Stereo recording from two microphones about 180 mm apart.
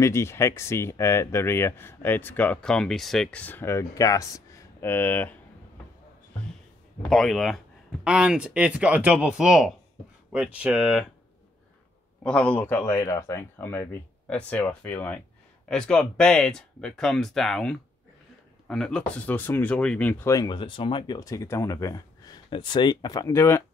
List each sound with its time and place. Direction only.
0.0 s speech: 15° left (ahead or behind)
7.1 s speech: centre (ahead or behind)
12.2 s speech: 5° left (ahead or behind)